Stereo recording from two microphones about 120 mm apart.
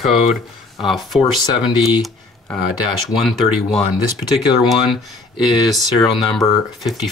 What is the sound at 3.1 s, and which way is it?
Speech, centre (ahead or behind).